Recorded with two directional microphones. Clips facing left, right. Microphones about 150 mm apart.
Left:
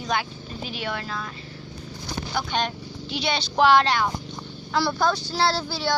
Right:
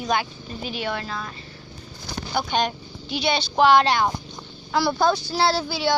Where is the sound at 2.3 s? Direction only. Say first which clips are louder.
Right 3 dB; 15° right (ahead or behind).